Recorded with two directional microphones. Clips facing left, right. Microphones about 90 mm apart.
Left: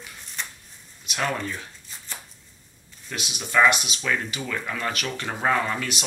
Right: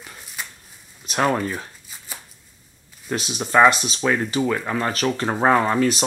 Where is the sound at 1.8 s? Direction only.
10° right (ahead or behind).